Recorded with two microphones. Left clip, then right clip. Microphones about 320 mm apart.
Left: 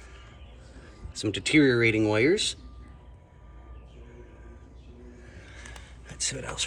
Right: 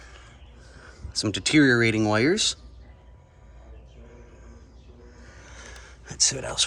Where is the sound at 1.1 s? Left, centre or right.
Centre.